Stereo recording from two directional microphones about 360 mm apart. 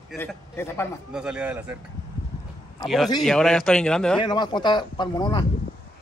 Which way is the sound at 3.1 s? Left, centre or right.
Centre.